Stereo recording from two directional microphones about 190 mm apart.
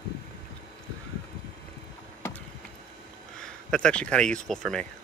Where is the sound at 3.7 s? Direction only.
5° left (ahead or behind).